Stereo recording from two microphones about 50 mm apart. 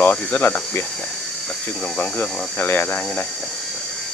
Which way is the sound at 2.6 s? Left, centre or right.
Left.